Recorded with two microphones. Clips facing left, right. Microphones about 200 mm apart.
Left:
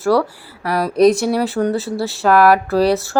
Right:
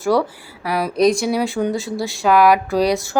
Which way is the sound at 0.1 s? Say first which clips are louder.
Left 1 dB; 20° right (ahead or behind).